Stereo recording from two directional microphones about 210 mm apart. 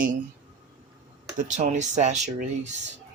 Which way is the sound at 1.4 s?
35° right (ahead or behind).